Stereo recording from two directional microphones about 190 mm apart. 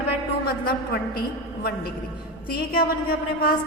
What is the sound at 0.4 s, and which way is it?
Speech, 55° left (ahead or behind).